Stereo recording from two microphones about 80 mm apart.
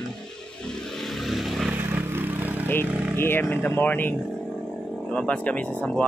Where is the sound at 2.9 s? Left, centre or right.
Centre.